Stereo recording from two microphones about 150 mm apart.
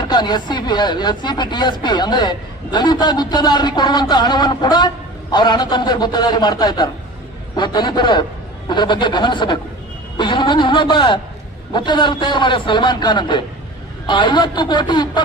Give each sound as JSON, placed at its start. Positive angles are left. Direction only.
{"t": 0.0, "sound": "a man's voice", "side_deg": 30}